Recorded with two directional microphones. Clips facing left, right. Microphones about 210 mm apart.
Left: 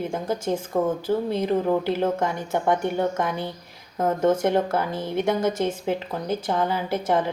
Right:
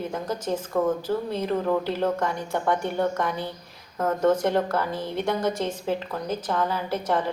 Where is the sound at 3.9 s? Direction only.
30° left (ahead or behind).